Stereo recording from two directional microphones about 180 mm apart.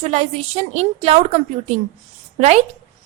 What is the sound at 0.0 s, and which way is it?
A woman's voice, 35° right (ahead or behind).